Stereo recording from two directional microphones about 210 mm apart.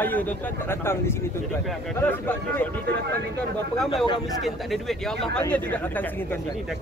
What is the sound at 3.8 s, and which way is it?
Speech, centre (ahead or behind).